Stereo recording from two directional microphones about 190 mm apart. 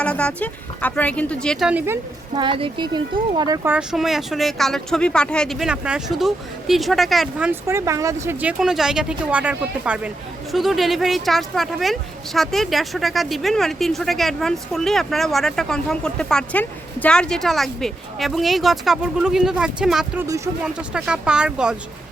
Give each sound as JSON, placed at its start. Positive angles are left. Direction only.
{"t": 0.0, "sound": "speech", "side_deg": 5}
{"t": 2.3, "sound": "speech", "side_deg": -25}
{"t": 20.2, "sound": "speech", "side_deg": -15}
{"t": 20.7, "sound": "speech", "side_deg": -5}